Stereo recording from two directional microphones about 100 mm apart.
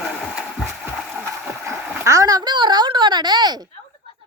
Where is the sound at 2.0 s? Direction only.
30° right (ahead or behind).